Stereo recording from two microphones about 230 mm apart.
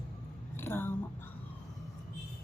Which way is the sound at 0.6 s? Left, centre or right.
Centre.